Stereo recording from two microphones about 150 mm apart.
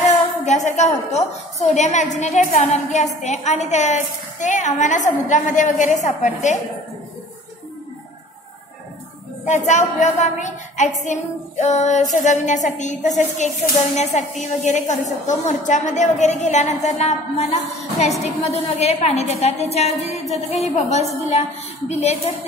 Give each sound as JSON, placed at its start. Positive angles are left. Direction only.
{"t": 0.5, "sound": "a woman's voice", "side_deg": 50}
{"t": 9.4, "sound": "a woman's voice", "side_deg": 50}